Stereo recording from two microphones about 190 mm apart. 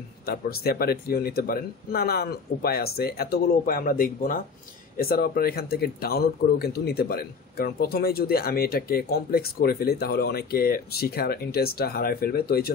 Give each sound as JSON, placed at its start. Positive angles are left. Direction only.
{"t": 0.3, "sound": "speech", "side_deg": 55}